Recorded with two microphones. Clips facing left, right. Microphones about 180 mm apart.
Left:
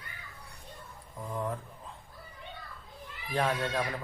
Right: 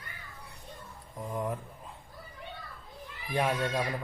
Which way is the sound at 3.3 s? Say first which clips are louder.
Right 1 dB; 15° right (ahead or behind).